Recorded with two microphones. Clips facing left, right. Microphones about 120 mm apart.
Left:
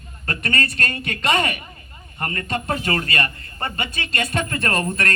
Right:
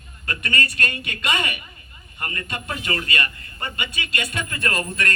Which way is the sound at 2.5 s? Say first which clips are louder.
Left 6 dB; 35° left (ahead or behind).